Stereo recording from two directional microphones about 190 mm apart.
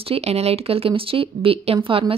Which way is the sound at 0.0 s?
30° right (ahead or behind).